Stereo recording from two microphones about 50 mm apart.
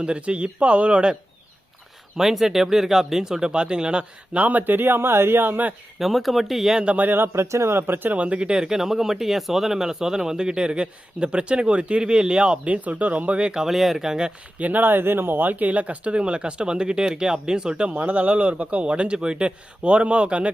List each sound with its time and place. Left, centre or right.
0.0 s speech: right
2.1 s speech: centre
4.4 s speech: right
6.0 s speech: centre
6.9 s speech: right
7.3 s speech: right
7.8 s speech: right
13.5 s speech: centre
14.6 s speech: right; by 17.9 s centre
17.9 s speech: right